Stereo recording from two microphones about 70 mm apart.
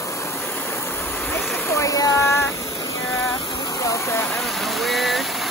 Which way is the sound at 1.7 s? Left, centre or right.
Left.